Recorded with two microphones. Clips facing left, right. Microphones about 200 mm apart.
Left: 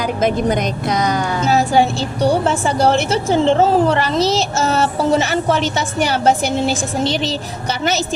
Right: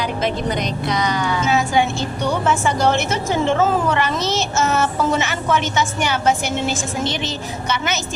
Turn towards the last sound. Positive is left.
turn(degrees=35)  # may be behind; listen again after turning